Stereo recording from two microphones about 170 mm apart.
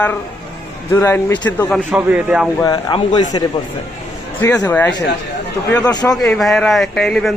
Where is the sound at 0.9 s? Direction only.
15° left (ahead or behind).